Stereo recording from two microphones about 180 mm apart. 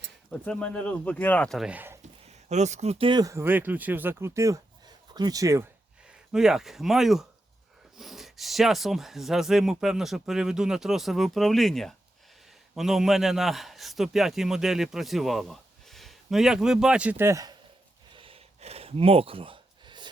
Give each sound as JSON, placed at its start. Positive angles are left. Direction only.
{"t": 0.3, "sound": "speech", "side_deg": 5}
{"t": 2.2, "sound": "speech", "side_deg": -40}
{"t": 6.1, "sound": "a man's voice", "side_deg": -5}
{"t": 18.1, "sound": "gasp", "side_deg": -30}